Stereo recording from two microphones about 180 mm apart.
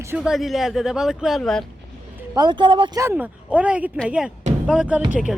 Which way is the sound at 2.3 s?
25° right (ahead or behind).